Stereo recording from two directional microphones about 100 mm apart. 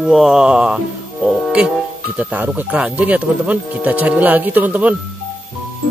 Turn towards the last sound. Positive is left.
turn(degrees=-15)  # may be behind; listen again after turning